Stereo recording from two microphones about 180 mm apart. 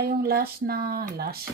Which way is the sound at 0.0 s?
60° right (ahead or behind).